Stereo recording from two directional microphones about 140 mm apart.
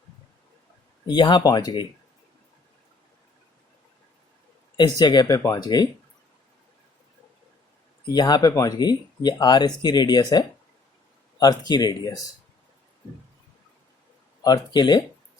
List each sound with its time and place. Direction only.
1.0 s speech: 35° left (ahead or behind)
4.8 s speech: 30° left (ahead or behind)
8.1 s speech: 30° left (ahead or behind)
14.4 s speech: 30° left (ahead or behind)